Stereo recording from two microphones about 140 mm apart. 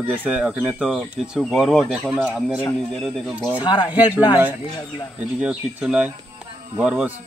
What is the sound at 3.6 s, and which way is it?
Speech, 35° left (ahead or behind).